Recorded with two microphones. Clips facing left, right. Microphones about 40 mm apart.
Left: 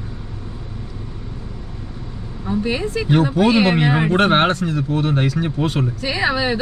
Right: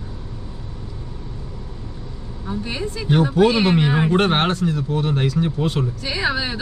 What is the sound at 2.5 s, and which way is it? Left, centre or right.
A man's voice, centre.